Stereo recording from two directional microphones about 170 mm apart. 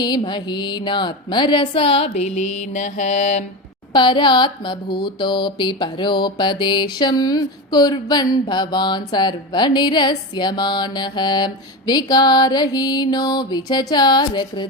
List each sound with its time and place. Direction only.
0.0 s music: 25° left (ahead or behind)
2.7 s mantra: 45° left (ahead or behind)
3.9 s music: 30° left (ahead or behind)